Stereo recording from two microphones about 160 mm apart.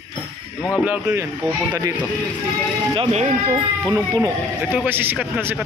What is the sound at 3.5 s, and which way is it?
Speech, 20° right (ahead or behind).